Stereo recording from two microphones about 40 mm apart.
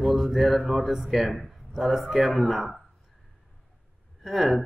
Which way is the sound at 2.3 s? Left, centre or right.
Centre.